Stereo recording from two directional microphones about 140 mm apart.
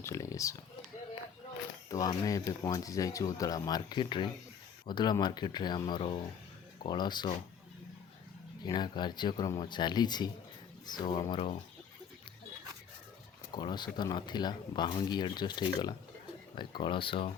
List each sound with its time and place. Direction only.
0.0 s speech: 20° left (ahead or behind)
1.9 s speech: 25° left (ahead or behind)
8.6 s speech: 30° left (ahead or behind)
13.5 s speech: 30° left (ahead or behind)